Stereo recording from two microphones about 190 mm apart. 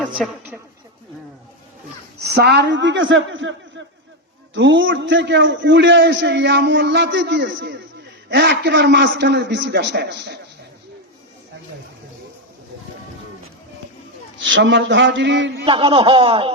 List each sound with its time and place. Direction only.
2.2 s a man's voice: 60° right (ahead or behind)
14.3 s a man's voice: 75° right (ahead or behind)
15.6 s a man's voice: 30° right (ahead or behind)